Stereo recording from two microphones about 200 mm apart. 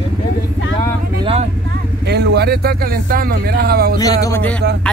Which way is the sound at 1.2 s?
30° right (ahead or behind).